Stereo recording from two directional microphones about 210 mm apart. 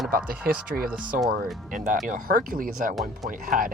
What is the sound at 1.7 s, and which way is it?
Speech, 40° right (ahead or behind).